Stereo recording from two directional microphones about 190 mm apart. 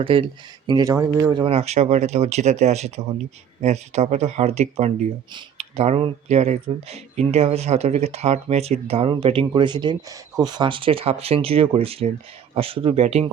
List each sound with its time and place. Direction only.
0.0 s speech: 30° right (ahead or behind)